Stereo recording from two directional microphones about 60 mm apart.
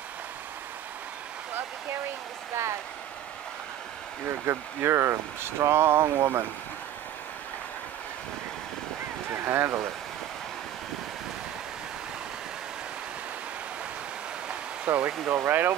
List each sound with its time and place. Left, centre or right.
4.3 s speech: right
9.3 s speech: right
14.9 s speech: right
15.2 s speech: right